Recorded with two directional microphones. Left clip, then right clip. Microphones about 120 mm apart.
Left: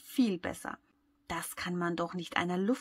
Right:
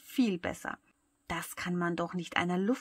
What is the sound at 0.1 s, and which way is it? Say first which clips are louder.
Speech: even; 20° right (ahead or behind).